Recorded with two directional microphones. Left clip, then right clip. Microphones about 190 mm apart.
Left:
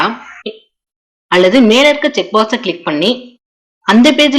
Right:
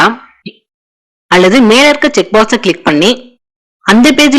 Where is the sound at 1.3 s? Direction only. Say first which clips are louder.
Right 3 dB; 40° right (ahead or behind).